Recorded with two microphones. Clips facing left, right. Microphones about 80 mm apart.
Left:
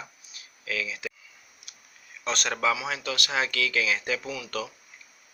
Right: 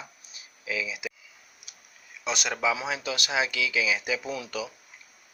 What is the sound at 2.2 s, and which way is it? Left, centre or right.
Speech, centre.